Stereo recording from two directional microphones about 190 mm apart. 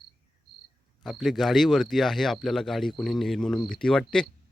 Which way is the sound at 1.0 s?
Centre (ahead or behind).